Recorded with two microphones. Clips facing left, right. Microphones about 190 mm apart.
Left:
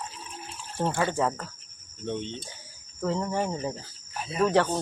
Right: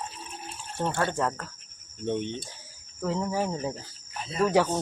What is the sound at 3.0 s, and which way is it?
Speech, 5° right (ahead or behind).